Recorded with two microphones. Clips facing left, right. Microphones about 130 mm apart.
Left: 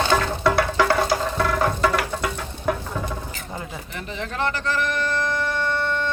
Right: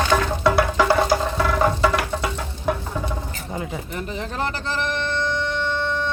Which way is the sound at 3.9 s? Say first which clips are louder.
Right 2 dB; 40° right (ahead or behind).